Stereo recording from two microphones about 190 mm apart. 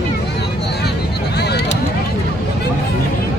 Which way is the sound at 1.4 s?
60° left (ahead or behind).